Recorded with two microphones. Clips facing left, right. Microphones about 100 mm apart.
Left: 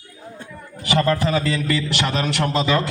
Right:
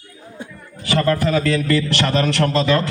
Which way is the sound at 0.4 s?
15° right (ahead or behind).